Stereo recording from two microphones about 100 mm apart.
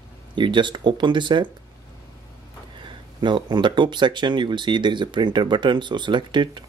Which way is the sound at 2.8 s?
50° right (ahead or behind).